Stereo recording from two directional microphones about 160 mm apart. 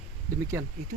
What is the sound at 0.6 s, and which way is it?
Speech, 15° right (ahead or behind).